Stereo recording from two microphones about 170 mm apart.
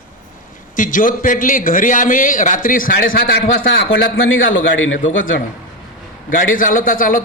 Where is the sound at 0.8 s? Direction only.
50° left (ahead or behind).